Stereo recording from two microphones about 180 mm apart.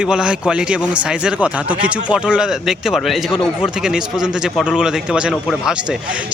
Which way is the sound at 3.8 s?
5° right (ahead or behind).